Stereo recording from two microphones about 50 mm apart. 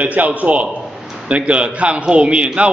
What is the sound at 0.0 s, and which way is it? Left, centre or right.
A man's voice, right.